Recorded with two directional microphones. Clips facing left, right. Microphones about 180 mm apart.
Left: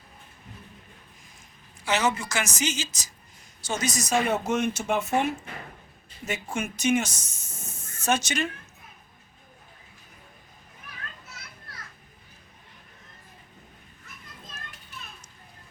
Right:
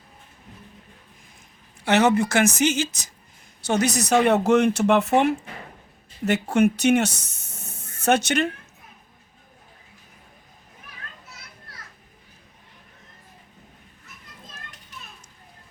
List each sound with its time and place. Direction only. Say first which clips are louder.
1.8 s a woman's voice: right 8 dB; 60° right (ahead or behind)